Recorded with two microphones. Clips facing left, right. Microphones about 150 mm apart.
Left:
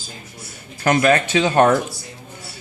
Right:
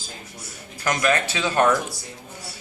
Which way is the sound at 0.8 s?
55° left (ahead or behind).